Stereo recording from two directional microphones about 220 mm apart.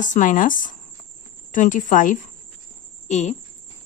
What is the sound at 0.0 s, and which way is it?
Speech, 35° left (ahead or behind).